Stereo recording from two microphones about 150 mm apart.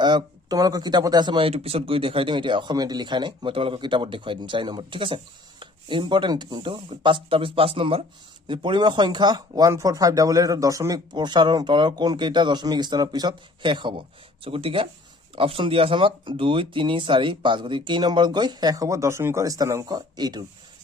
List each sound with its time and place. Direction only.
0.0 s speech: 30° right (ahead or behind)
1.5 s speech: 40° right (ahead or behind)